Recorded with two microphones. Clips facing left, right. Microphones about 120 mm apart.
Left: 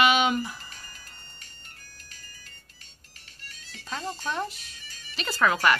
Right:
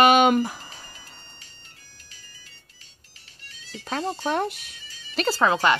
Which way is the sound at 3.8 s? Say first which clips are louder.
Right 6 dB; 60° right (ahead or behind).